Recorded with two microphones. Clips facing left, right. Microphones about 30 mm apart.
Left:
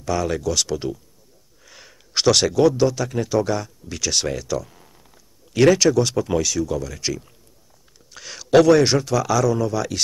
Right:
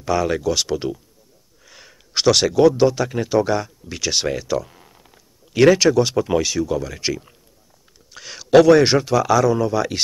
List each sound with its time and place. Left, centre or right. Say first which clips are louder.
0.0 s speech: right 3 dB; centre
1.7 s speech: right 1 dB; centre
8.1 s a man's voice: right 3 dB; centre